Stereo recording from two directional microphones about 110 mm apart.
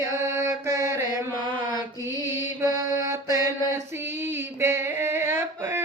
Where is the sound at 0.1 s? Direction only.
25° right (ahead or behind).